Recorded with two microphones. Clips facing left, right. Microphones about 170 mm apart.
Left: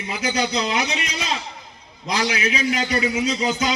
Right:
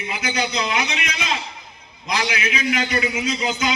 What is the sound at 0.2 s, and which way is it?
A man's voice, 40° left (ahead or behind).